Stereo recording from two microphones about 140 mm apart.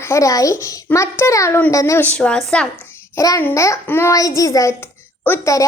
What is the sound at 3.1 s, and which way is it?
A woman's voice, 20° left (ahead or behind).